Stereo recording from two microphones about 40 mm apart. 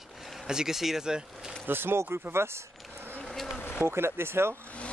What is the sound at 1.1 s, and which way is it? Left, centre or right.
Speech, centre.